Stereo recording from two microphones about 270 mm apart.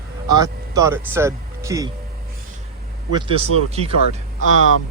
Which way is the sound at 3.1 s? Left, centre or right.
Centre.